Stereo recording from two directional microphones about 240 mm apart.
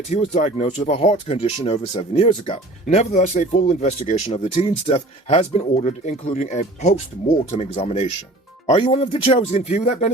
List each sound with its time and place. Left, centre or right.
0.1 s speech: left